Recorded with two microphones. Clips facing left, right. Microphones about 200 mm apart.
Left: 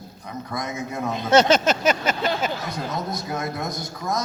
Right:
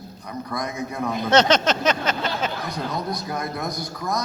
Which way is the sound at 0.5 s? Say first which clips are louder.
Right 1 dB; 25° left (ahead or behind).